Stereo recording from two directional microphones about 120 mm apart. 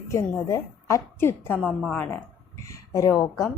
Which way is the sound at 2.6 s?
25° left (ahead or behind).